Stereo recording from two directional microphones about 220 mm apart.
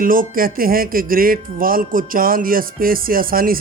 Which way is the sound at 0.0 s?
40° right (ahead or behind).